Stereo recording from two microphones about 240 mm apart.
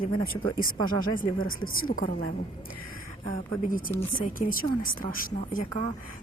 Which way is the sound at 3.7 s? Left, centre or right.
Left.